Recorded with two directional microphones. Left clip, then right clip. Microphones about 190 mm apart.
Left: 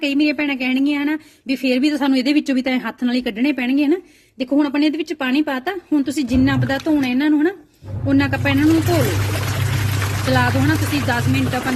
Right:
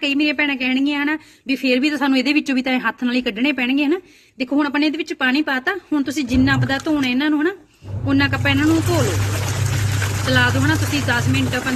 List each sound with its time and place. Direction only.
0.0 s a woman's voice: 35° left (ahead or behind)
10.2 s a woman's voice: 40° left (ahead or behind)